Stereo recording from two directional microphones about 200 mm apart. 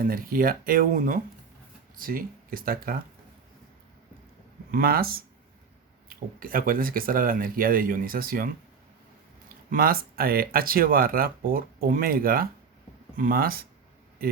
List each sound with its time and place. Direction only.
0.0 s speech: 45° right (ahead or behind)
4.7 s speech: 50° right (ahead or behind)
9.6 s speech: 45° right (ahead or behind)